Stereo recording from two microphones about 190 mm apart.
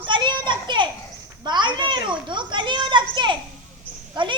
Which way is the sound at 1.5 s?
25° right (ahead or behind).